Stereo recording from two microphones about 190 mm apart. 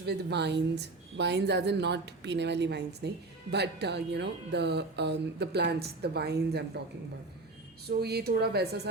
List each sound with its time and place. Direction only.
0.0 s speech: 60° right (ahead or behind)
7.9 s speech: 60° right (ahead or behind)